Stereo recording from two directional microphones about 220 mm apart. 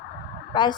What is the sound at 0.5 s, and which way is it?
Speech, 20° left (ahead or behind).